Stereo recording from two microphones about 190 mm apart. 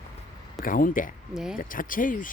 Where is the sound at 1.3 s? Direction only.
5° right (ahead or behind).